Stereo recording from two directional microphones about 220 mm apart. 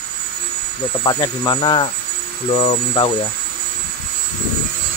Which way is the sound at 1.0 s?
20° left (ahead or behind).